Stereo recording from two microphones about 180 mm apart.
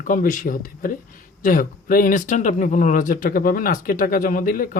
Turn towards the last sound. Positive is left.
turn(degrees=50)  # may be behind; listen again after turning